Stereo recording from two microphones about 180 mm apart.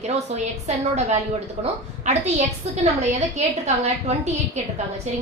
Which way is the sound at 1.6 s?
40° right (ahead or behind).